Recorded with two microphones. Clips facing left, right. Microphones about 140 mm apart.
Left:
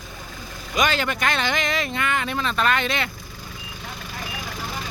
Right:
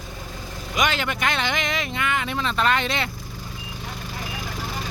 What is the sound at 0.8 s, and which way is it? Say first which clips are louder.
Speech: left 1 dB; 15° right (ahead or behind).